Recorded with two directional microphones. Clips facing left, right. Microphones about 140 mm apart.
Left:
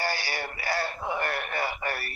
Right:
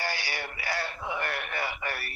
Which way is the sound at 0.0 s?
35° left (ahead or behind).